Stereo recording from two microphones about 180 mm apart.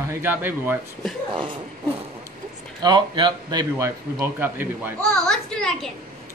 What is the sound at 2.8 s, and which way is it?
A man's voice, 25° right (ahead or behind).